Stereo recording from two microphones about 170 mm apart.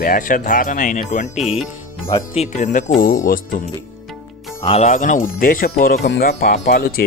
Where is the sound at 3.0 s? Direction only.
55° left (ahead or behind).